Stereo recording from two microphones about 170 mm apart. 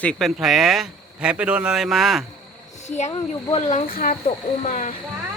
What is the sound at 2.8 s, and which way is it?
Speech, 40° left (ahead or behind).